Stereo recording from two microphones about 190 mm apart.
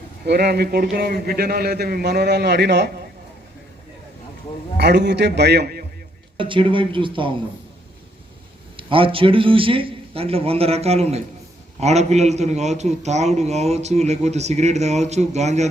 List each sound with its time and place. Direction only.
0.3 s a man's voice: 60° right (ahead or behind)
4.8 s a man's voice: 60° right (ahead or behind)
6.3 s a man's voice: 25° right (ahead or behind)
8.7 s a man's voice: 30° right (ahead or behind)